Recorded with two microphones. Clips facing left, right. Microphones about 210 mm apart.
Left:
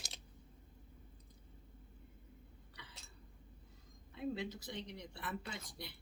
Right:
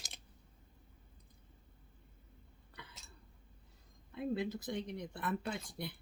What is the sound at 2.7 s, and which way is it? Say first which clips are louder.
Hiccup: right 5 dB; 55° right (ahead or behind).